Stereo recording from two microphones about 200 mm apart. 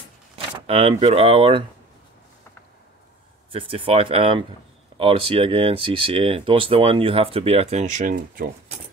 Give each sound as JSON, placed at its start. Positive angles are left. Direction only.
{"t": 0.7, "sound": "speech", "side_deg": -30}
{"t": 3.5, "sound": "speech", "side_deg": -25}